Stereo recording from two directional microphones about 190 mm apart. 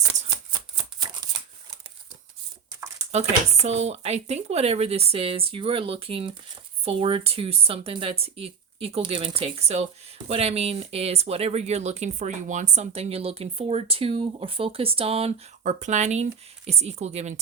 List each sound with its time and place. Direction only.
1.0 s shuffling cards: 20° right (ahead or behind)
3.1 s speech: 35° right (ahead or behind)